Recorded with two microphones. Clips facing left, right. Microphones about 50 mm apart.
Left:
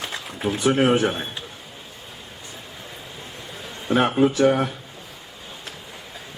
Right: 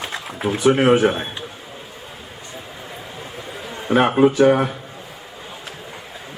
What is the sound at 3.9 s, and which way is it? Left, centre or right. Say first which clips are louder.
Speech: right 4 dB; right.